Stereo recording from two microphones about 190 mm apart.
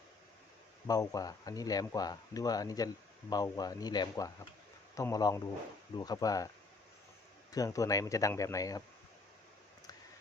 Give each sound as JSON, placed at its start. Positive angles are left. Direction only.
{"t": 0.9, "sound": "speech", "side_deg": 20}
{"t": 7.5, "sound": "speech", "side_deg": 20}